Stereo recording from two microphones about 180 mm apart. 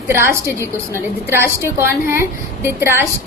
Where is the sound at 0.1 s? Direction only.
15° right (ahead or behind).